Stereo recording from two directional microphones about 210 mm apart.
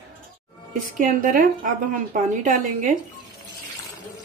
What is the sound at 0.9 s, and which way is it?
A woman's voice, 40° right (ahead or behind).